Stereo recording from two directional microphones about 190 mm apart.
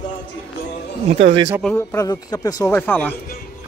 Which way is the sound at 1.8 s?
15° left (ahead or behind).